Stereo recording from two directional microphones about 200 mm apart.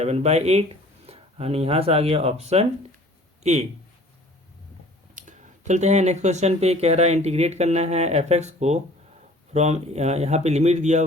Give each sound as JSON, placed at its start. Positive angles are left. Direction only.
{"t": 0.0, "sound": "speech", "side_deg": -35}
{"t": 5.1, "sound": "speech", "side_deg": -35}